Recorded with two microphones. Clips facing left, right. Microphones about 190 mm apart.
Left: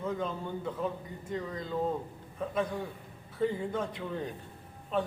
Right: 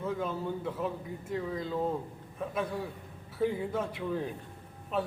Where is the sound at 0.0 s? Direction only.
5° right (ahead or behind).